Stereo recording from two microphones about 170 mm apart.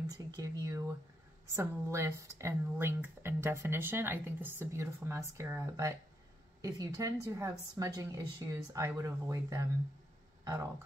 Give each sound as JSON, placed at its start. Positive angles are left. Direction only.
{"t": 0.4, "sound": "speech", "side_deg": -20}